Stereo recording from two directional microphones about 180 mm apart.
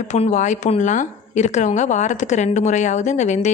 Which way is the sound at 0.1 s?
40° left (ahead or behind).